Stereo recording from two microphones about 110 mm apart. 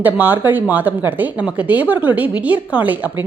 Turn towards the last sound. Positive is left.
turn(degrees=-15)  # may be behind; listen again after turning